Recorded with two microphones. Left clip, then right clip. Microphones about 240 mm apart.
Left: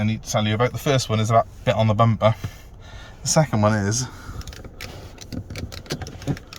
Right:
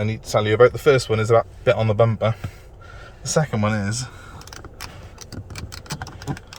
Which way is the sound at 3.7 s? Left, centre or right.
Centre.